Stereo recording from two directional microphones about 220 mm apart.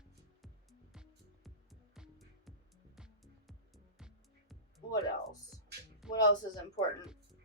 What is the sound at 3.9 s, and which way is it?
Music, centre (ahead or behind).